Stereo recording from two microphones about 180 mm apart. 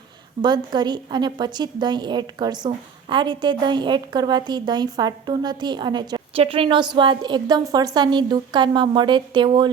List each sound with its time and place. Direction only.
0.4 s a woman's voice: 25° right (ahead or behind)